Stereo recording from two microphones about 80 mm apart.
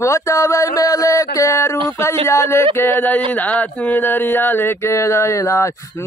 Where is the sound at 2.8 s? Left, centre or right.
Left.